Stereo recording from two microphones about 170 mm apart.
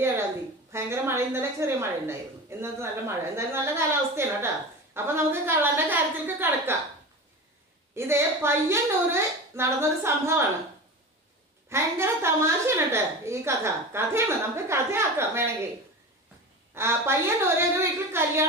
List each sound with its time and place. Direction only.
0.7 s a woman's voice: 15° right (ahead or behind)
7.9 s a woman's voice: 15° right (ahead or behind)
11.7 s a woman's voice: 15° right (ahead or behind)
16.7 s a woman's voice: 15° right (ahead or behind)